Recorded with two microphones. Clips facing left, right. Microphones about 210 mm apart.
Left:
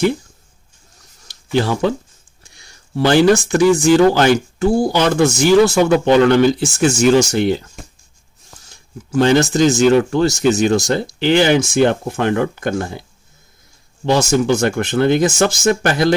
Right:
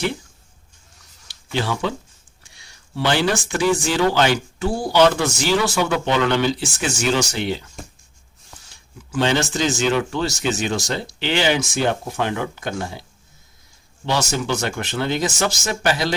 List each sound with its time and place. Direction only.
1.3 s speech: 45° left (ahead or behind)
9.1 s speech: 45° left (ahead or behind)